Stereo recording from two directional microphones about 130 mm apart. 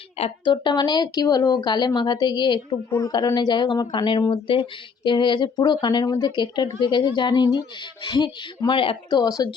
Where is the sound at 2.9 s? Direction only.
20° left (ahead or behind).